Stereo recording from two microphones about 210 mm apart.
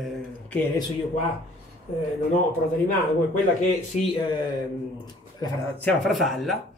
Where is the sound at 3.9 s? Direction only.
35° left (ahead or behind).